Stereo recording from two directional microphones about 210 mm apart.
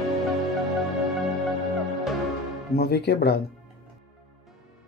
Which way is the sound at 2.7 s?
50° left (ahead or behind).